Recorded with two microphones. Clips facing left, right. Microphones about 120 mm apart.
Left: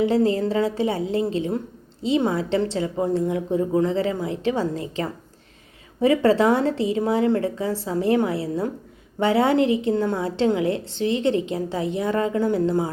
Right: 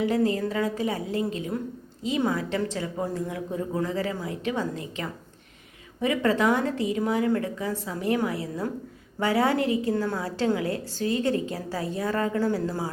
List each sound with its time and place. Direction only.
0.0 s a woman's voice: 30° left (ahead or behind)